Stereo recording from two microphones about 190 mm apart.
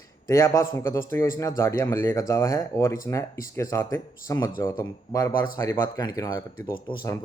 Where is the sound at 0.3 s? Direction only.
15° left (ahead or behind).